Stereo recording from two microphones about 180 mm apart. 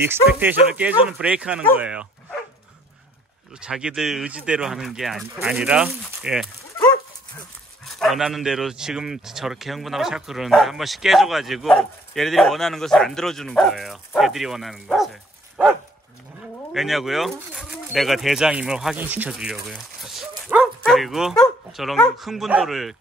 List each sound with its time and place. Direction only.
0.0 s speech: 10° right (ahead or behind)
3.6 s speech: 5° right (ahead or behind)
7.8 s speech: centre (ahead or behind)
16.7 s speech: centre (ahead or behind)